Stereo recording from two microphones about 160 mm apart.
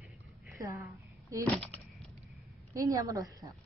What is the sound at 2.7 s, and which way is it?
Speech, 20° right (ahead or behind).